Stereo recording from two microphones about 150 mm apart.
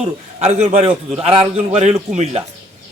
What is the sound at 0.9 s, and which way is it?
Speech, 10° right (ahead or behind).